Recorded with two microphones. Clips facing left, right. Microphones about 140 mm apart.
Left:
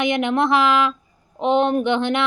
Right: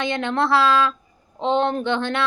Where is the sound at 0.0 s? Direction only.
15° left (ahead or behind).